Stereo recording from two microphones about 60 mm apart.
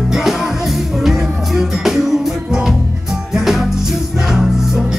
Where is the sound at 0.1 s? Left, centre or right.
Centre.